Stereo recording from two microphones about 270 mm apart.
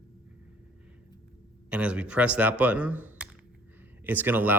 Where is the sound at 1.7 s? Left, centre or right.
Centre.